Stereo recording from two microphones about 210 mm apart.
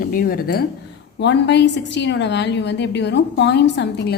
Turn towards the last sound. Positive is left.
turn(degrees=55)  # may be behind; listen again after turning